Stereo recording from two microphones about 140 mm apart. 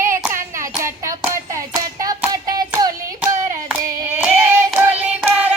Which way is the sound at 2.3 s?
25° right (ahead or behind).